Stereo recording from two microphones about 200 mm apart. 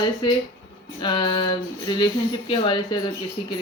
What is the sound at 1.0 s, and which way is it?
Speech, 20° left (ahead or behind).